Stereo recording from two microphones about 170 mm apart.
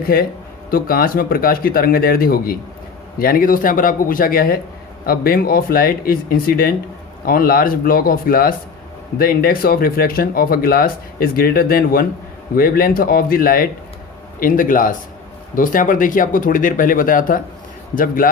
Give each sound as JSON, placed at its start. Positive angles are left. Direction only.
{"t": 0.1, "sound": "speech", "side_deg": 60}